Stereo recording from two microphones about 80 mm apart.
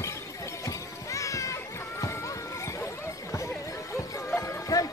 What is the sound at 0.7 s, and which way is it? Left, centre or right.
Music, left.